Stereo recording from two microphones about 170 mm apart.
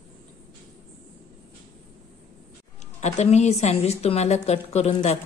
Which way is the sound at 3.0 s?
40° left (ahead or behind).